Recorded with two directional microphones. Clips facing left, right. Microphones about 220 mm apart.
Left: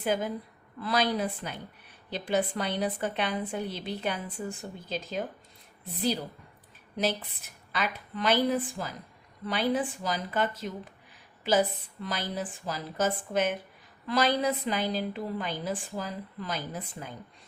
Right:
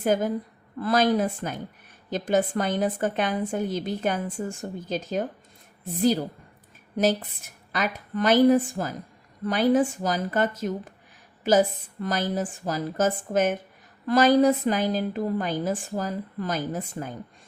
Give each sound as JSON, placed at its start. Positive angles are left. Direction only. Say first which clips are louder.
{"t": 0.0, "sound": "a woman's voice", "louder": "right 6 dB", "side_deg": -45}